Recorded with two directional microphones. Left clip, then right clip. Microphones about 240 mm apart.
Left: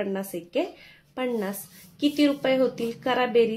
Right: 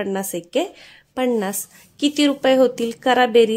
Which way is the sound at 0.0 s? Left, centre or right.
Right.